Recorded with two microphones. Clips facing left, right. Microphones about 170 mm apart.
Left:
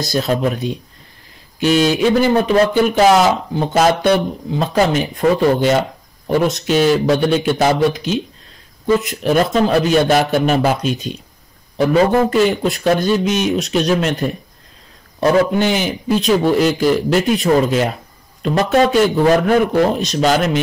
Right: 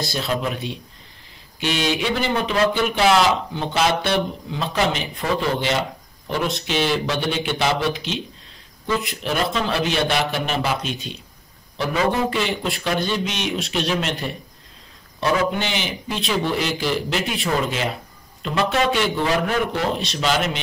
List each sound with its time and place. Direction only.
0.0 s speech: 45° left (ahead or behind)